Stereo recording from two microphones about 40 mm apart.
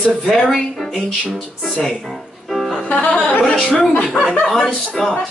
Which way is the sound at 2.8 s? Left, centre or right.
Left.